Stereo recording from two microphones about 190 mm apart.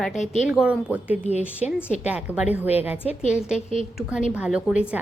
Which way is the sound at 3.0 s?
35° left (ahead or behind).